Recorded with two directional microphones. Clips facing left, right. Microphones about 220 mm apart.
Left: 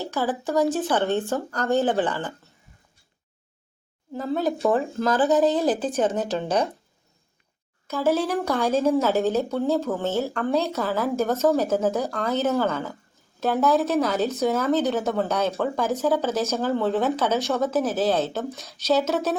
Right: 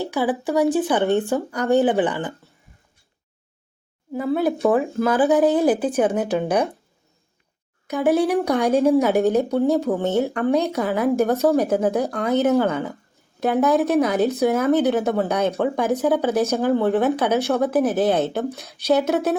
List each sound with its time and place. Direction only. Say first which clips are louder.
0.0 s speech: right 4 dB; 15° right (ahead or behind)
4.1 s speech: right 4 dB; 10° right (ahead or behind)
7.9 s speech: right 4 dB; 15° right (ahead or behind)